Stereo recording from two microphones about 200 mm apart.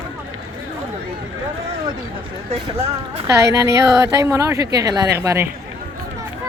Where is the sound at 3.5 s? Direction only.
15° right (ahead or behind).